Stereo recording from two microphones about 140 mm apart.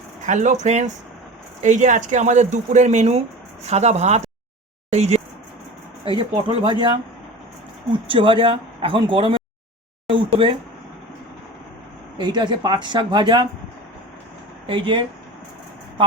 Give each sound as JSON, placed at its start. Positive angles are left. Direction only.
{"t": 0.3, "sound": "speech", "side_deg": -60}
{"t": 6.1, "sound": "speech", "side_deg": -40}
{"t": 8.0, "sound": "speech", "side_deg": -40}
{"t": 12.1, "sound": "speech", "side_deg": -30}
{"t": 14.7, "sound": "speech", "side_deg": -35}